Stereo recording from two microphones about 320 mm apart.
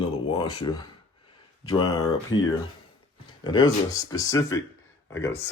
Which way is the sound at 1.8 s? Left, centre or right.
Left.